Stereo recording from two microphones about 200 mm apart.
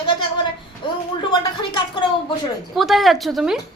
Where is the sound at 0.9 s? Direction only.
20° left (ahead or behind).